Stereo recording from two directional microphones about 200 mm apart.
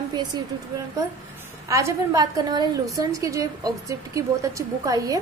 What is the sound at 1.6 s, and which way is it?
A woman's voice, 15° right (ahead or behind).